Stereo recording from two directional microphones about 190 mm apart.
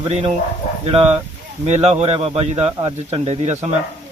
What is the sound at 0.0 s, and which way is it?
Speech, 30° right (ahead or behind).